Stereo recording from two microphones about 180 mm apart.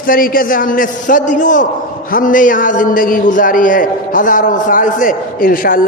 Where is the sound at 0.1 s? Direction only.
50° left (ahead or behind).